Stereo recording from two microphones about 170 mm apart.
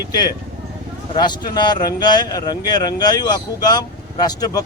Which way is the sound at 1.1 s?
25° left (ahead or behind).